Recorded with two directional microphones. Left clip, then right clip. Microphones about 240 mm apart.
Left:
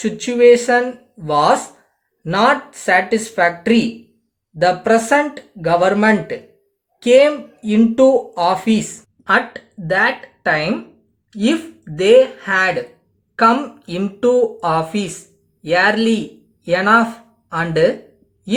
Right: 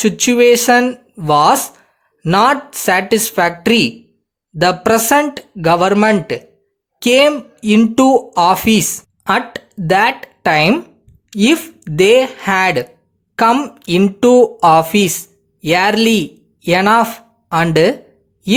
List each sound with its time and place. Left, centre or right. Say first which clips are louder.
0.0 s speech: right 2 dB; right